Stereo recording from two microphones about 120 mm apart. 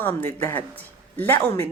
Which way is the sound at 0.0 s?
20° left (ahead or behind).